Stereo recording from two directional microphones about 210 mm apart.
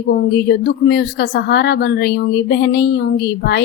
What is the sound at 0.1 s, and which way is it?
Speech, 50° left (ahead or behind).